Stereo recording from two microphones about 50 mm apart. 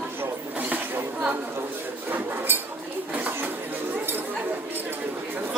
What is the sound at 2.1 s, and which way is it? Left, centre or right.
Dishes, right.